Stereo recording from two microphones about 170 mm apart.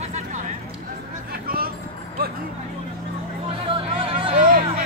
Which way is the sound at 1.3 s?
60° right (ahead or behind).